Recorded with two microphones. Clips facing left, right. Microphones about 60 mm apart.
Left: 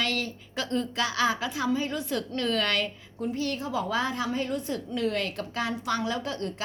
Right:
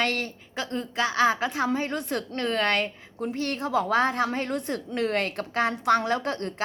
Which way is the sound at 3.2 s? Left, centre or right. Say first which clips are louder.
Right 1 dB; right.